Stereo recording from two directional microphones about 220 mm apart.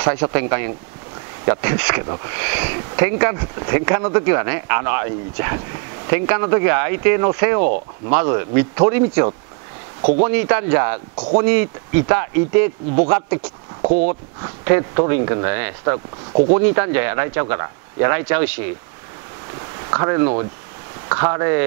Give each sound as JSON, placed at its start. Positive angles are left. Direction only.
{"t": 0.2, "sound": "speech", "side_deg": -15}
{"t": 19.9, "sound": "speech", "side_deg": -20}